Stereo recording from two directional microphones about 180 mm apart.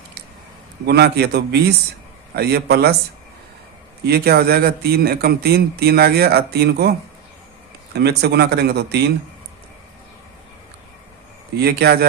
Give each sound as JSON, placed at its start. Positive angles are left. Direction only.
{"t": 0.9, "sound": "speech", "side_deg": -65}
{"t": 4.0, "sound": "speech", "side_deg": -60}
{"t": 7.9, "sound": "speech", "side_deg": -65}
{"t": 11.5, "sound": "speech", "side_deg": -60}